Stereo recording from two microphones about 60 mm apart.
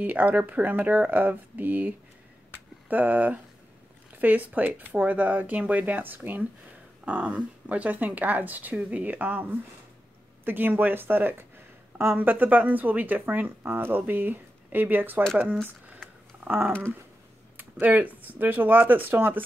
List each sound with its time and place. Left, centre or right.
0.0 s speech: right
2.5 s a sound: right
4.1 s speech: right
7.0 s speech: centre; by 12.3 s right
12.3 s speech: right
16.4 s speech: right